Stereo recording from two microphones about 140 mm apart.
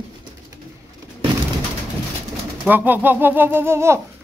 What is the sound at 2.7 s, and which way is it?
Speech, 15° right (ahead or behind).